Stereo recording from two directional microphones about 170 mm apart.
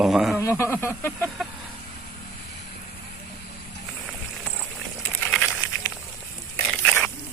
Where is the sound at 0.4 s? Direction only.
15° left (ahead or behind).